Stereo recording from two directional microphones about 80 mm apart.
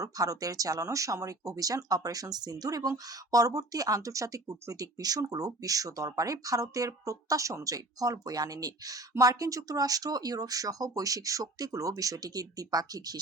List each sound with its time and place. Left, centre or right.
0.0 s speech: right